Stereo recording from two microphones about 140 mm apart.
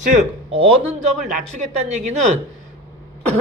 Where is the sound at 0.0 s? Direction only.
50° right (ahead or behind).